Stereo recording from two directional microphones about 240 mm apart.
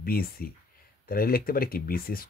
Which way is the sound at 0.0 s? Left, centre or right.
Left.